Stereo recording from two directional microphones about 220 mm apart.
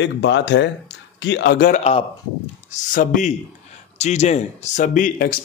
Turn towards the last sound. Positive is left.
turn(degrees=40)  # may be behind; listen again after turning